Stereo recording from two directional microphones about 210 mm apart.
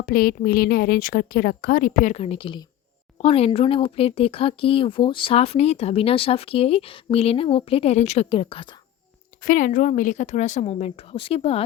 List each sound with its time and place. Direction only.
0.0 s a woman's voice: 45° left (ahead or behind); by 8.8 s 25° left (ahead or behind)
9.4 s a woman's voice: 40° left (ahead or behind)